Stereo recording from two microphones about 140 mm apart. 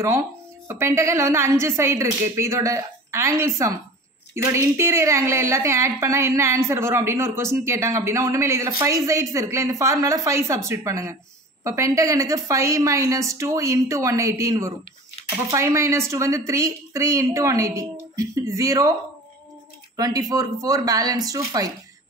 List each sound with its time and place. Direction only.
0.0 s a woman's voice: 20° right (ahead or behind)
20.0 s a woman's voice: 25° right (ahead or behind)